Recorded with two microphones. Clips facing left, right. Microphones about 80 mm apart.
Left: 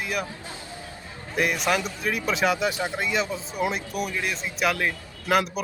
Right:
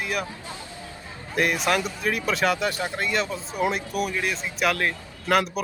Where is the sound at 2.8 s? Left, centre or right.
Centre.